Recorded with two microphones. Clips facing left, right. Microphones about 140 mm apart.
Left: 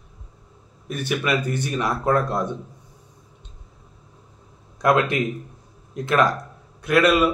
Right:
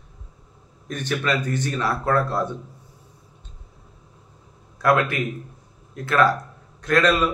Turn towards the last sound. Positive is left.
turn(degrees=10)  # may be behind; listen again after turning